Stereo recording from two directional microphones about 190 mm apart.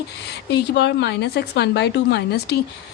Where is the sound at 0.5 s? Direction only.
65° left (ahead or behind).